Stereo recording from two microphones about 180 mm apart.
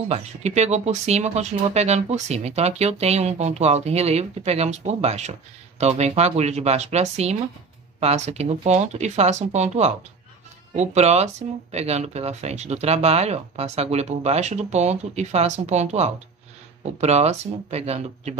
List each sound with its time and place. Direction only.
0.1 s speech: 40° right (ahead or behind)